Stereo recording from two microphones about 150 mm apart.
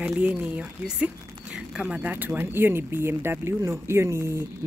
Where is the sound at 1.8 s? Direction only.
10° right (ahead or behind).